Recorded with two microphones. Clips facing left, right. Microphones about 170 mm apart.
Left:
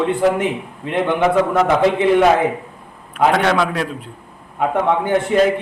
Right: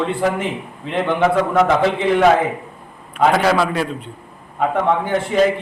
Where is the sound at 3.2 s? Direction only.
Centre (ahead or behind).